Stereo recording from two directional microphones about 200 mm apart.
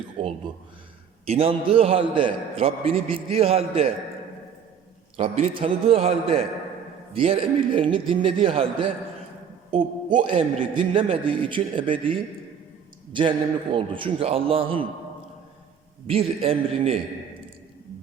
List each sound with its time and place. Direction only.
0.2 s a man's voice: 30° right (ahead or behind)
5.1 s a man's voice: 30° right (ahead or behind)
9.7 s a man's voice: 40° right (ahead or behind)
10.8 s a man's voice: 25° right (ahead or behind)
16.0 s a man's voice: 30° right (ahead or behind)